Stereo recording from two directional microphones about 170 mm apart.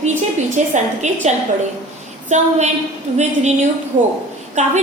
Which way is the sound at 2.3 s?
45° right (ahead or behind).